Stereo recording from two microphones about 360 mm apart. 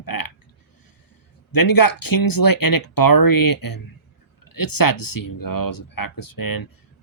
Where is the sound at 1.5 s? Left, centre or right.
Left.